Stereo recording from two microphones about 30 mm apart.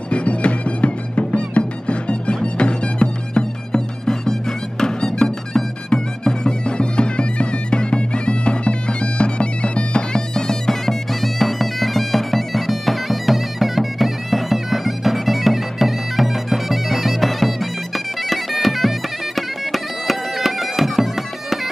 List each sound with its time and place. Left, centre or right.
0.1 s music: left
3.7 s music: left
10.3 s bagpipes: centre
11.1 s bagpipes: centre